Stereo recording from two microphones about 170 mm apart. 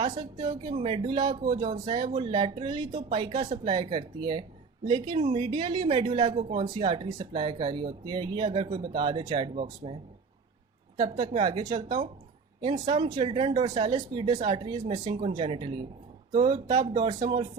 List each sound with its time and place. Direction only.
0.1 s speech: 25° right (ahead or behind)